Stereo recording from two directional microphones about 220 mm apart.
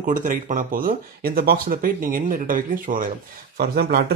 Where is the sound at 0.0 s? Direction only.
35° right (ahead or behind).